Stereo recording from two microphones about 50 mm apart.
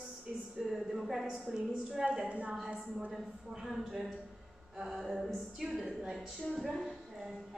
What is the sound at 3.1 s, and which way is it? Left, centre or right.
A man's voice, centre.